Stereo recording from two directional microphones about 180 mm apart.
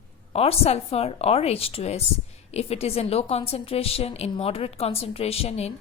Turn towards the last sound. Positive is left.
turn(degrees=35)  # may be behind; listen again after turning